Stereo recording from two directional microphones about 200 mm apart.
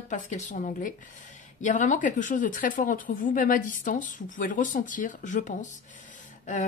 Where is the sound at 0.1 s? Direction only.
40° left (ahead or behind).